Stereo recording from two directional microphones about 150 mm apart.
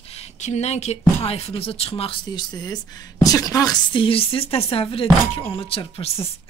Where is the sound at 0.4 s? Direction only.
50° left (ahead or behind).